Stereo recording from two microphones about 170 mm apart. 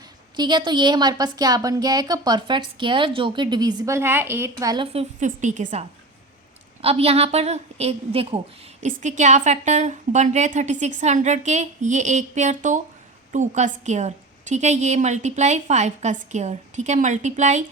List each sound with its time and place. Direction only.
0.3 s a woman's voice: 25° right (ahead or behind)
4.9 s a woman's voice: 40° right (ahead or behind)
6.8 s a woman's voice: 35° right (ahead or behind)